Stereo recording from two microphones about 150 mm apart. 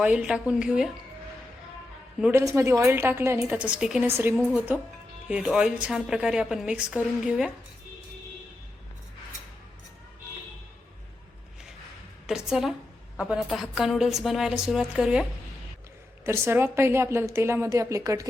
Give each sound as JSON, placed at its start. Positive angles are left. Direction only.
{"t": 0.0, "sound": "a woman's voice", "side_deg": -5}
{"t": 2.3, "sound": "a woman's voice", "side_deg": -20}
{"t": 4.0, "sound": "a woman's voice", "side_deg": -15}
{"t": 12.2, "sound": "a woman's voice", "side_deg": -5}
{"t": 16.2, "sound": "a woman's voice", "side_deg": -15}